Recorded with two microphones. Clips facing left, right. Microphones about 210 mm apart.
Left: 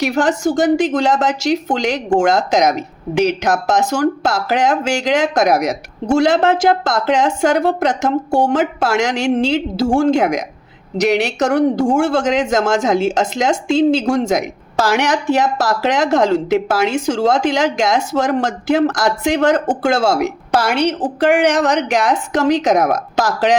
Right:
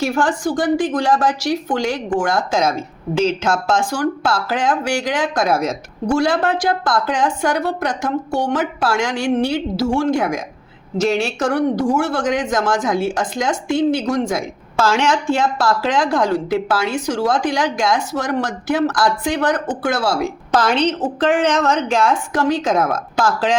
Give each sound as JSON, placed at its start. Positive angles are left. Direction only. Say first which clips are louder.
{"t": 0.0, "sound": "speech", "louder": "left 3 dB", "side_deg": 20}
{"t": 8.9, "sound": "a woman's voice", "louder": "even", "side_deg": 20}
{"t": 20.6, "sound": "a woman's voice", "louder": "left 1 dB", "side_deg": 10}